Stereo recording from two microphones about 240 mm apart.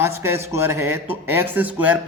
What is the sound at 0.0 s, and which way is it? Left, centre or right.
A man's voice, centre.